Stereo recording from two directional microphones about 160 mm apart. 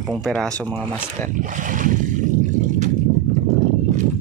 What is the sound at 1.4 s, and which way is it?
Boat, 55° right (ahead or behind).